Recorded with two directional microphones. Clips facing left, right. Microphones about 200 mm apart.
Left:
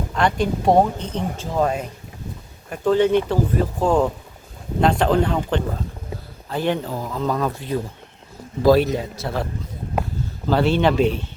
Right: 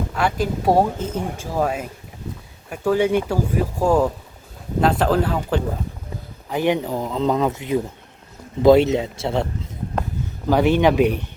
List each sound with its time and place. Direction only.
0.1 s speech: 5° right (ahead or behind); by 9.5 s 25° right (ahead or behind)
10.5 s speech: 15° right (ahead or behind)